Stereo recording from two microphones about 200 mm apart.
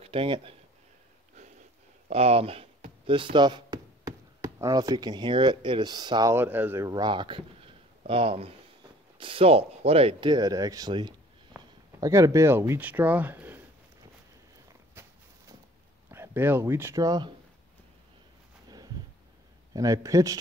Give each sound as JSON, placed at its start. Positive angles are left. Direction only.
{"t": 0.0, "sound": "speech", "side_deg": -25}
{"t": 2.0, "sound": "speech", "side_deg": -30}
{"t": 15.0, "sound": "a sound", "side_deg": -10}
{"t": 16.1, "sound": "speech", "side_deg": -10}
{"t": 19.7, "sound": "a man's voice", "side_deg": -15}